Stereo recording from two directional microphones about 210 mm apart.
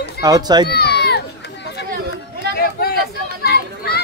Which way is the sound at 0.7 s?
50° left (ahead or behind).